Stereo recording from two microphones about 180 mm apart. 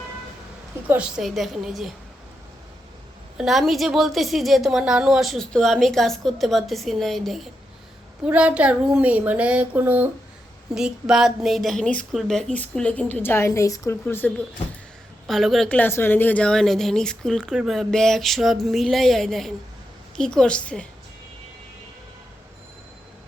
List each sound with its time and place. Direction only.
0.9 s a woman's voice: 5° right (ahead or behind)
3.3 s a woman's voice: centre (ahead or behind)
15.3 s a woman's voice: centre (ahead or behind)